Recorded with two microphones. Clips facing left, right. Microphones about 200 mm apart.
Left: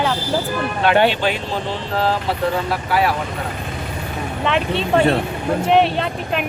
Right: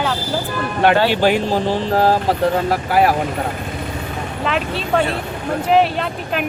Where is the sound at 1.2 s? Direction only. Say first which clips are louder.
Right 6 dB; 45° right (ahead or behind).